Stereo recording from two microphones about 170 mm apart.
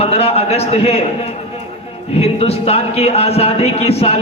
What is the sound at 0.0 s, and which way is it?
A man's voice, 35° left (ahead or behind).